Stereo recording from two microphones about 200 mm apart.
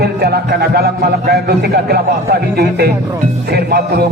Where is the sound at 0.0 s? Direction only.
55° right (ahead or behind).